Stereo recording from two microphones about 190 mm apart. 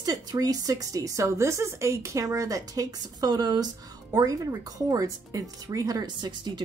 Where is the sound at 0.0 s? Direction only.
20° right (ahead or behind).